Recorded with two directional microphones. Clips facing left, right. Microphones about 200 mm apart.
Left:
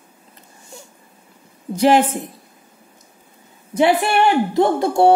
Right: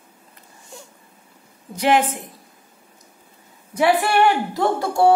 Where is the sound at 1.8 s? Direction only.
30° left (ahead or behind).